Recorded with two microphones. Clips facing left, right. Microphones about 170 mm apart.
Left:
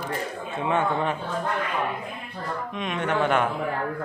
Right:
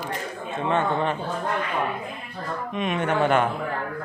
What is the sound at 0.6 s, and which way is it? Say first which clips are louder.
Speech: right 1 dB; 10° left (ahead or behind).